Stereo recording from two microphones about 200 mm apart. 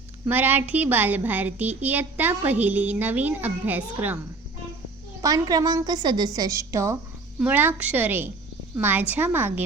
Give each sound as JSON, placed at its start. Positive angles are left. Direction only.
{"t": 0.3, "sound": "a woman's voice", "side_deg": -10}
{"t": 5.2, "sound": "a woman's voice", "side_deg": -20}